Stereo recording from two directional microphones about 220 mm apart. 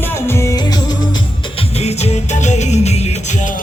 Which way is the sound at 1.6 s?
30° left (ahead or behind).